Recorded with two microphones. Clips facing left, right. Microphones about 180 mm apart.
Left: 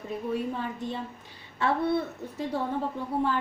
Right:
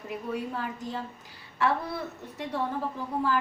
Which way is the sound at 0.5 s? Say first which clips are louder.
Left 1 dB; 25° left (ahead or behind).